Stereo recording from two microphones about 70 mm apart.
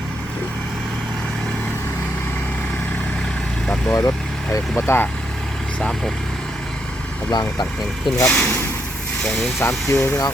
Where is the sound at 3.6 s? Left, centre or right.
Centre.